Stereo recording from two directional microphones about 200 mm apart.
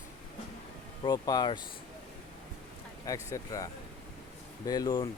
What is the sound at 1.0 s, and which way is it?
Speech, 20° left (ahead or behind).